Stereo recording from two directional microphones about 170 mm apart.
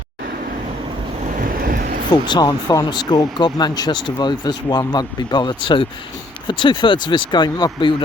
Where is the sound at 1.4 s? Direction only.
60° right (ahead or behind).